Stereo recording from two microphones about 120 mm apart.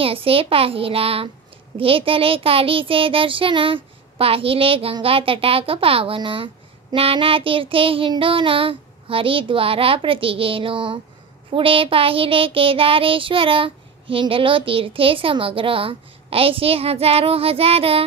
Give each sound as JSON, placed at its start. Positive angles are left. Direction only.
{"t": 0.0, "sound": "a child's voice", "side_deg": -50}